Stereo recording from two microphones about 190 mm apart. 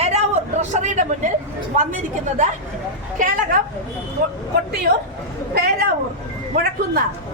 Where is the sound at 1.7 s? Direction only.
40° right (ahead or behind).